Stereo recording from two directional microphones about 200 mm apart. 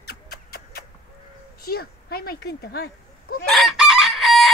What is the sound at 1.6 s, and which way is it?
Speech, 50° left (ahead or behind).